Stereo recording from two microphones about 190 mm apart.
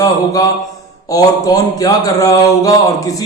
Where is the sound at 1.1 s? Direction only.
20° left (ahead or behind).